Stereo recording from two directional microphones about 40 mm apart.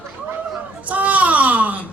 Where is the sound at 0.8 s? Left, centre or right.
Right.